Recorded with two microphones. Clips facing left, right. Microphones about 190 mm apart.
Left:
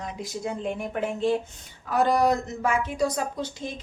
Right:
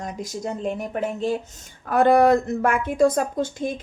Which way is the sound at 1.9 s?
55° right (ahead or behind).